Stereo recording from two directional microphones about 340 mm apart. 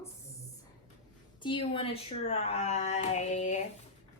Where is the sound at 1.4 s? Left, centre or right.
Centre.